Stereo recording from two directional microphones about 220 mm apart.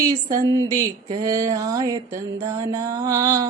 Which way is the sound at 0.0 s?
15° right (ahead or behind).